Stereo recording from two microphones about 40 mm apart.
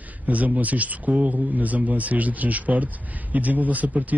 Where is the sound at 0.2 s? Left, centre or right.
Right.